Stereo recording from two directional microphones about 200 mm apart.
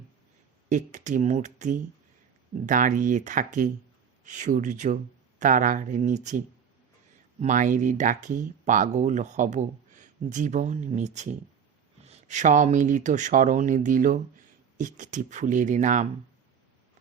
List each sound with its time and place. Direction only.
0.7 s speech: 40° right (ahead or behind)